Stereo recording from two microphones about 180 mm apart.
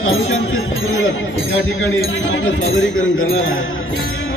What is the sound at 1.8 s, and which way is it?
Speech, 90° left.